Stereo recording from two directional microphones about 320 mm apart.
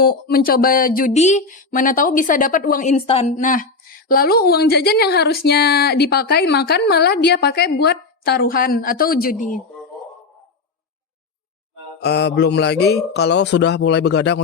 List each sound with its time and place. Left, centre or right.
0.0 s speech: left
12.0 s a man's voice: left